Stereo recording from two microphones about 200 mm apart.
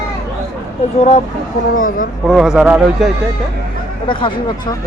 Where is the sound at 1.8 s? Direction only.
45° left (ahead or behind).